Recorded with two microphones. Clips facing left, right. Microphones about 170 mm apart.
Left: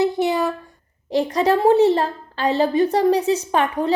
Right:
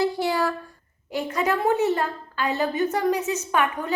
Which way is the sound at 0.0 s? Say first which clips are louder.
Left 4 dB; 20° left (ahead or behind).